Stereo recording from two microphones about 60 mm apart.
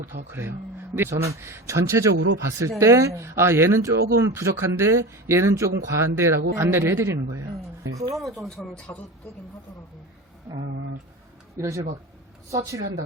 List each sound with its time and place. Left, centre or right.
0.3 s speech: right
1.1 s speech: right
8.1 s speech: centre
8.9 s speech: left
11.5 s speech: right